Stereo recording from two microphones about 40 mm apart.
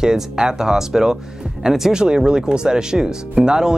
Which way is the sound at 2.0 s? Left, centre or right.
Right.